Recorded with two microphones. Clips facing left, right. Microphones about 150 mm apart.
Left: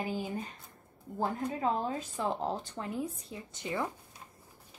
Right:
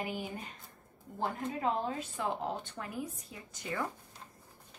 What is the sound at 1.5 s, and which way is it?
Speech, 35° left (ahead or behind).